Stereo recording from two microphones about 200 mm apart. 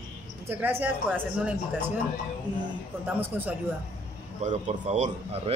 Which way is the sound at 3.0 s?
10° right (ahead or behind).